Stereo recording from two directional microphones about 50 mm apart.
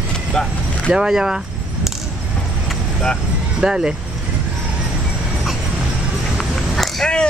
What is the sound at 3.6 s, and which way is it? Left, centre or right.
Speech, centre.